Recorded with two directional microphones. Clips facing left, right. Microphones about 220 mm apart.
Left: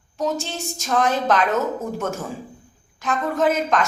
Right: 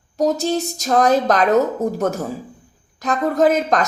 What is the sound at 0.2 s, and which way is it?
A woman's voice, 40° right (ahead or behind).